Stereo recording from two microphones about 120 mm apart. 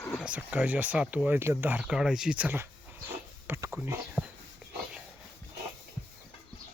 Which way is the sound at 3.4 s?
15° right (ahead or behind).